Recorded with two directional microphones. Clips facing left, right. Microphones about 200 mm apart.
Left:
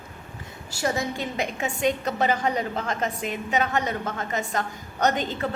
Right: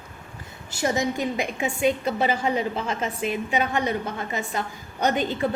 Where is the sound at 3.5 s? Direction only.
10° right (ahead or behind).